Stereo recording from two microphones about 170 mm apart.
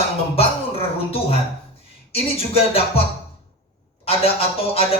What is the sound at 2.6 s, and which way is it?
Music, 35° left (ahead or behind).